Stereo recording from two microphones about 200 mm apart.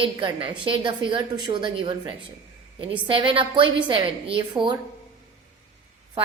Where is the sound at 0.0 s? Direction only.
25° right (ahead or behind).